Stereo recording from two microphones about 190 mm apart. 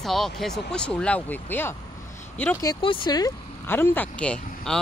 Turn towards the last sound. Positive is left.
turn(degrees=5)  # may be behind; listen again after turning